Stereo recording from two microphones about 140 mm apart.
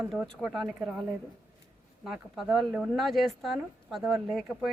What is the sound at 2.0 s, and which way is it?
Speech, centre (ahead or behind).